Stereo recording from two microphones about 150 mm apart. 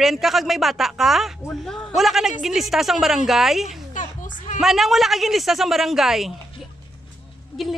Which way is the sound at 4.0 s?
55° left (ahead or behind).